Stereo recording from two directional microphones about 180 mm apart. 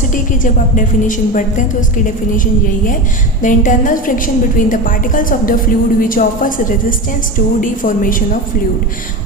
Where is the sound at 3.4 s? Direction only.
45° left (ahead or behind).